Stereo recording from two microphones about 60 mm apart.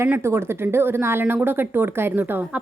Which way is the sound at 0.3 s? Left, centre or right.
Right.